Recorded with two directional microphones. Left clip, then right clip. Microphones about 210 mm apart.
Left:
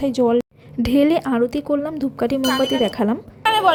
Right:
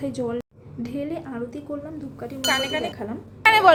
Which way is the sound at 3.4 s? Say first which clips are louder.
Right 1 dB; 25° right (ahead or behind).